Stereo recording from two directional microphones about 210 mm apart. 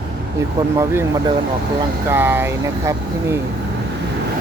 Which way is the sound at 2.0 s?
10° right (ahead or behind).